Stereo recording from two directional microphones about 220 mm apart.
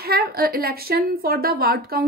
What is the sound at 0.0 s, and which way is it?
A woman's voice, 45° right (ahead or behind).